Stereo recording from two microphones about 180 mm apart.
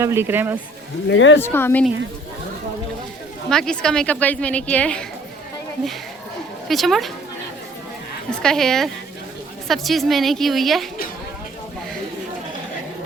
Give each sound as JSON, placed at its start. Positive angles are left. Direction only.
{"t": 0.0, "sound": "speech", "side_deg": -15}
{"t": 1.0, "sound": "speech", "side_deg": 90}
{"t": 1.4, "sound": "a woman's voice", "side_deg": 15}
{"t": 3.5, "sound": "a woman's voice", "side_deg": 5}
{"t": 6.7, "sound": "a woman's voice", "side_deg": 0}
{"t": 8.4, "sound": "a woman's voice", "side_deg": 5}